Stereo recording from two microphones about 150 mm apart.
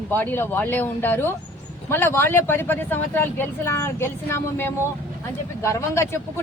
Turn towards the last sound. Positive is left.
turn(degrees=20)  # may be behind; listen again after turning